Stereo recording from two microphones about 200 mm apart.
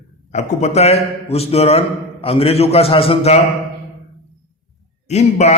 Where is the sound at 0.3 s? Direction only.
35° left (ahead or behind).